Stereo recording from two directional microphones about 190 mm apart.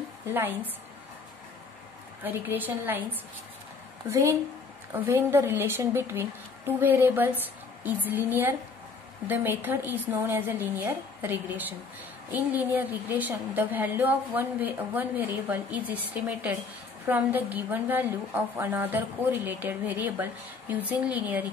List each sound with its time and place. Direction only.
0.3 s a woman's voice: 10° right (ahead or behind)
2.2 s a woman's voice: 10° right (ahead or behind)